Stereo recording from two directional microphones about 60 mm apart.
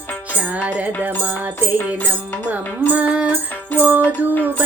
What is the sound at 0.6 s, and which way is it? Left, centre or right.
Music, centre.